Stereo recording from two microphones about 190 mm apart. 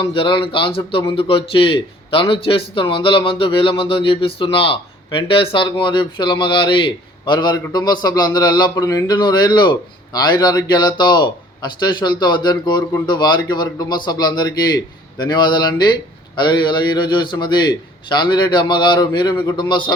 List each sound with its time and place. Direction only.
0.0 s a man's voice: 30° left (ahead or behind)